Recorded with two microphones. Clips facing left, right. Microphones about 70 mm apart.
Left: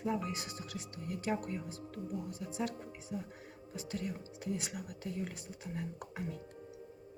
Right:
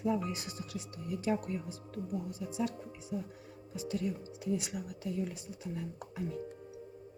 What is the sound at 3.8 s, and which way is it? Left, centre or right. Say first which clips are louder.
Speech: right 5 dB; left.